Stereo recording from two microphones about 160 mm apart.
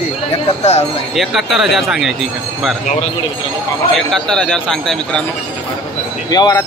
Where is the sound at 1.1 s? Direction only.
Centre (ahead or behind).